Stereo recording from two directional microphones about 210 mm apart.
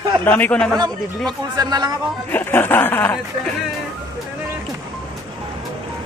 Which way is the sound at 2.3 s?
10° left (ahead or behind).